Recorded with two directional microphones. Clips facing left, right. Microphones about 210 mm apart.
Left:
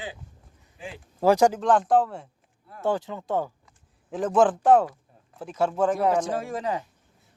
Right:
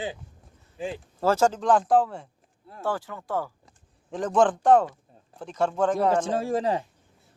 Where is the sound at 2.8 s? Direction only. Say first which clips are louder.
Left 4 dB; 20° left (ahead or behind).